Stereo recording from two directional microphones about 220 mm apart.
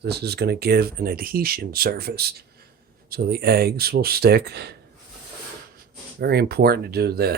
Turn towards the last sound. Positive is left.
turn(degrees=-45)  # may be behind; listen again after turning